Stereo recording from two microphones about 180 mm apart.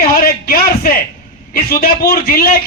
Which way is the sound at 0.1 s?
55° left (ahead or behind).